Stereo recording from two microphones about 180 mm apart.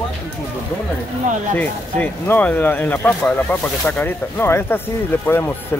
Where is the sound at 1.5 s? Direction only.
10° left (ahead or behind).